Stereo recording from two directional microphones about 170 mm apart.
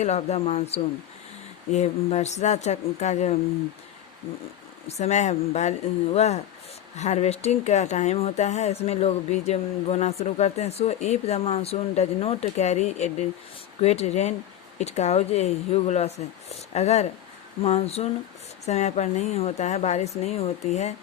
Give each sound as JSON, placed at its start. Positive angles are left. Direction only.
{"t": 0.0, "sound": "speech", "side_deg": 40}
{"t": 4.9, "sound": "speech", "side_deg": 40}